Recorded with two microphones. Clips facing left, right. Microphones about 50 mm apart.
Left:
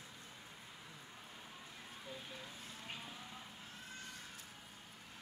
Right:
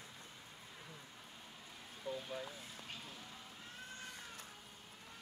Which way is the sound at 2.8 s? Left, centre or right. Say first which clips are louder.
Left 4 dB; centre.